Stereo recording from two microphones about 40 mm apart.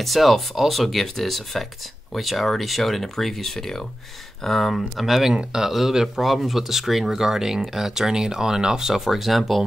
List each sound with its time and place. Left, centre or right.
0.0 s speech: centre
5.3 s speech: right
5.6 s speech: centre
9.0 s speech: centre